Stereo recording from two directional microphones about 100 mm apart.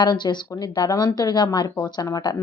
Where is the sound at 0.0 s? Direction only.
50° left (ahead or behind).